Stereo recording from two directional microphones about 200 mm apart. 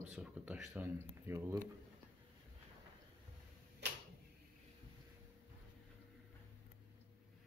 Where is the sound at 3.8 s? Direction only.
60° right (ahead or behind).